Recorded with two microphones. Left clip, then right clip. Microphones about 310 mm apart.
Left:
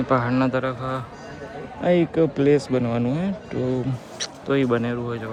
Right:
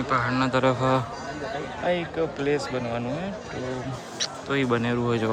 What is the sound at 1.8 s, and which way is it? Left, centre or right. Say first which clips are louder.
Speech: left 7 dB; centre.